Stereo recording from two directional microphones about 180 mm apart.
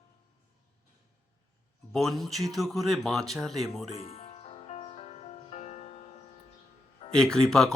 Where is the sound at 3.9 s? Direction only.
35° left (ahead or behind).